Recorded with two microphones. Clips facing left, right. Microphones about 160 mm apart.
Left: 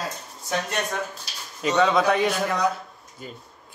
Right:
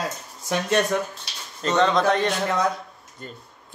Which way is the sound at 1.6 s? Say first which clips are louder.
Even; 5° left (ahead or behind).